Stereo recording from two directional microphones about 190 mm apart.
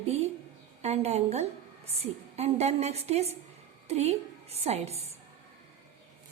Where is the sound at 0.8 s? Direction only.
35° right (ahead or behind).